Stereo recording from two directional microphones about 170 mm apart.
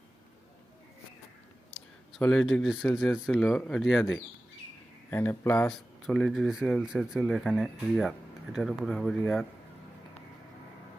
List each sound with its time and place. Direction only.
1.7 s speech: centre (ahead or behind)
5.1 s speech: 15° left (ahead or behind)
5.6 s speech: 5° left (ahead or behind)